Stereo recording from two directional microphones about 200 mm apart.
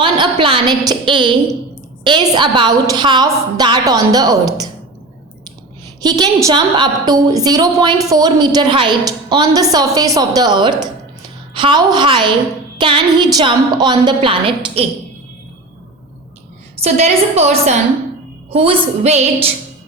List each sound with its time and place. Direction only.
0.0 s a woman's voice: 25° right (ahead or behind)
6.0 s a woman's voice: 20° right (ahead or behind)
16.8 s a woman's voice: 30° right (ahead or behind)